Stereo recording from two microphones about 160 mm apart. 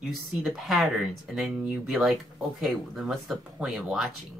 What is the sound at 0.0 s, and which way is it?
Speech, centre (ahead or behind).